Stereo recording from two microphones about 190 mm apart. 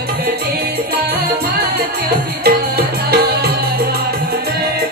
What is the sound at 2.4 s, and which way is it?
Music, 55° right (ahead or behind).